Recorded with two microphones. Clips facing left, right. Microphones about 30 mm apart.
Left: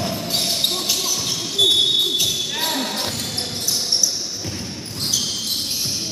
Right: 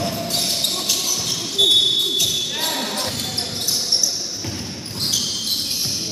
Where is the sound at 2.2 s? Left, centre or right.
Centre.